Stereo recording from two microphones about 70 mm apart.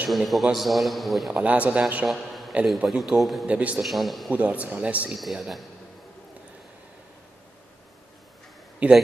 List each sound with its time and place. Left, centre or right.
0.1 s a man's voice: centre
1.3 s a man's voice: centre
3.4 s speech: centre
3.8 s a man's voice: centre
4.3 s speech: right
5.1 s a man's voice: centre
8.8 s speech: right